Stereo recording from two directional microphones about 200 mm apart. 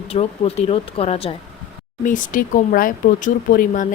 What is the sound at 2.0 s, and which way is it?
Speech, 40° left (ahead or behind).